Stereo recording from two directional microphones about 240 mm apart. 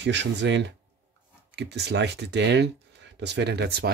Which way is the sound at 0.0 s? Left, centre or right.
Right.